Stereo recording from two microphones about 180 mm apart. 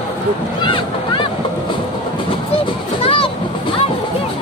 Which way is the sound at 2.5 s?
30° left (ahead or behind).